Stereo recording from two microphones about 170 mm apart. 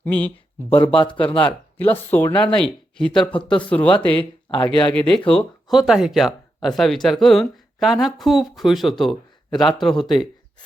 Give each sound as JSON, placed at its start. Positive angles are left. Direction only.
{"t": 0.0, "sound": "speech", "side_deg": 10}
{"t": 0.7, "sound": "speech", "side_deg": 30}
{"t": 1.8, "sound": "speech", "side_deg": 10}
{"t": 4.2, "sound": "speech", "side_deg": 30}
{"t": 4.9, "sound": "speech", "side_deg": 5}